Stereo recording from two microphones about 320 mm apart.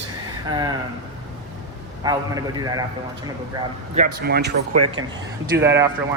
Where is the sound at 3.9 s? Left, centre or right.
Right.